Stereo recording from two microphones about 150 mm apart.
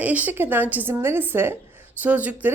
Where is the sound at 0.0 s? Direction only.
10° right (ahead or behind).